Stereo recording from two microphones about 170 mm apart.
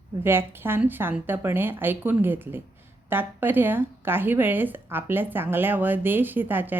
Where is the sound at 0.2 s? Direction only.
15° right (ahead or behind).